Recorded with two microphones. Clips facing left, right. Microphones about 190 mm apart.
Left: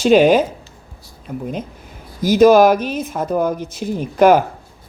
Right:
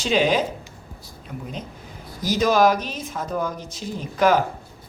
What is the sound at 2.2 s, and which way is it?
Speech, 55° left (ahead or behind).